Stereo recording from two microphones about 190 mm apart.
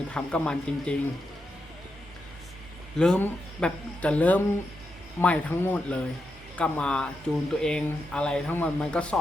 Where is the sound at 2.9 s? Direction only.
5° left (ahead or behind).